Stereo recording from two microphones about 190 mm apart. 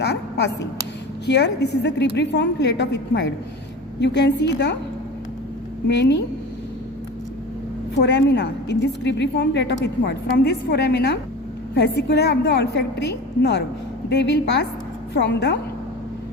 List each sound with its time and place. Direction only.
0.0 s a sound: 60° left (ahead or behind)
1.3 s a woman's voice: 65° left (ahead or behind)
5.9 s a woman's voice: 65° left (ahead or behind)
7.9 s a woman's voice: 65° left (ahead or behind)